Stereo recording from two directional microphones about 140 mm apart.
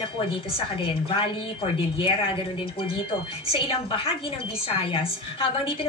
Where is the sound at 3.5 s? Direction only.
40° left (ahead or behind).